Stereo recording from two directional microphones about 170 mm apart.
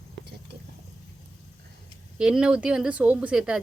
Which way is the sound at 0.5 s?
75° right (ahead or behind).